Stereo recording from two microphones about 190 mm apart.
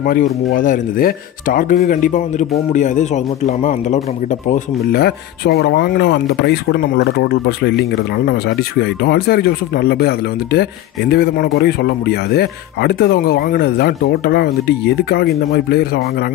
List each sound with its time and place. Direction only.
0.0 s speech: 50° left (ahead or behind)
4.5 s speech: 55° left (ahead or behind)